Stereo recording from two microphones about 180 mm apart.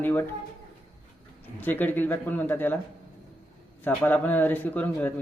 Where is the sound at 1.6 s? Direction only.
10° left (ahead or behind).